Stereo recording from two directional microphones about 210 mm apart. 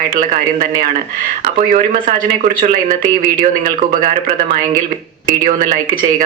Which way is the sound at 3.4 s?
40° right (ahead or behind).